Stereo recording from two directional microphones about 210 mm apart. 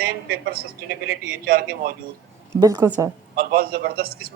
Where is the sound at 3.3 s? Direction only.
45° right (ahead or behind).